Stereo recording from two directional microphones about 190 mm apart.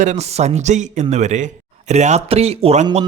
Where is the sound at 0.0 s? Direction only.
35° right (ahead or behind).